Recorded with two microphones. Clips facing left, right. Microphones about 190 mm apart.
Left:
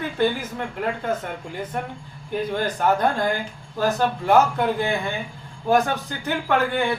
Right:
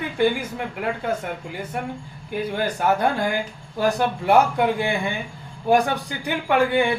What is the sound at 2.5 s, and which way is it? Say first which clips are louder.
Speech: even; 10° right (ahead or behind).